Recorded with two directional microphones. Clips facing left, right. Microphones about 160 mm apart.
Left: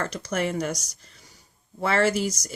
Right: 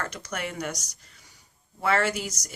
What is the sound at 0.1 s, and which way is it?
Speech, 30° left (ahead or behind).